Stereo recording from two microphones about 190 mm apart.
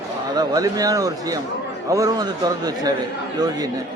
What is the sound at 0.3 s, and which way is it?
Speech, 20° right (ahead or behind).